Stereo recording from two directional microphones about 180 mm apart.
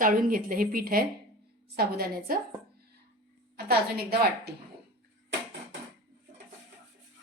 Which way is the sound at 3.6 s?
60° right (ahead or behind).